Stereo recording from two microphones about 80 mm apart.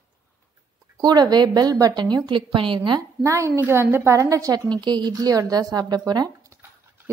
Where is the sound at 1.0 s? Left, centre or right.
Right.